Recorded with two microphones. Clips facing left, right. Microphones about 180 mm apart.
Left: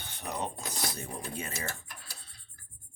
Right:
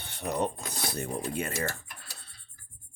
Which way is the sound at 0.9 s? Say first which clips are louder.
Right 6 dB; 60° right (ahead or behind).